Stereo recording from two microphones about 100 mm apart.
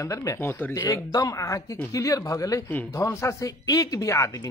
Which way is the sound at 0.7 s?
35° left (ahead or behind).